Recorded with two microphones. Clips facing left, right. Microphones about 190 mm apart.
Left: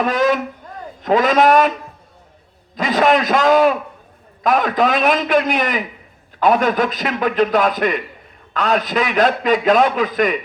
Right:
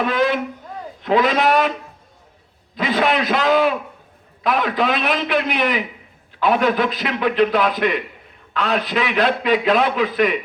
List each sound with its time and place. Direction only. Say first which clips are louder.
0.0 s a man's voice: left 2 dB; 45° left (ahead or behind)
2.7 s a man's voice: left 3 dB; 45° left (ahead or behind)